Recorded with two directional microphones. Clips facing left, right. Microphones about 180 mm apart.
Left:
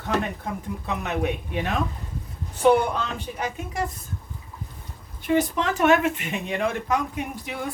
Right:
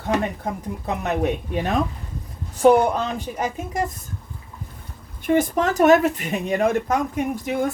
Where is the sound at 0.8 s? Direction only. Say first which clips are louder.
Right 4 dB; 40° right (ahead or behind).